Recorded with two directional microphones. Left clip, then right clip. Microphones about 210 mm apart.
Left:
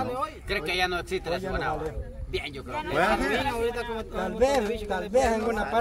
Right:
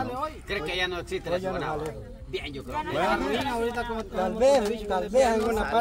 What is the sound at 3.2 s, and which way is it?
Speech, 30° left (ahead or behind).